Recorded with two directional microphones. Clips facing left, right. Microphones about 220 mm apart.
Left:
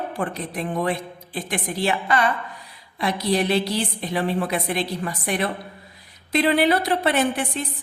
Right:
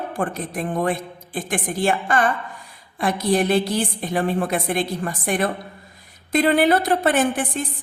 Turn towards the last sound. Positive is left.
turn(degrees=-50)  # may be behind; listen again after turning